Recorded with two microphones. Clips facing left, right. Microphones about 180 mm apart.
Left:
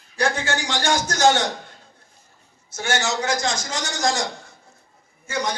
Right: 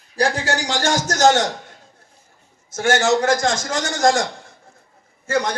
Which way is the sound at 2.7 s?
50° right (ahead or behind).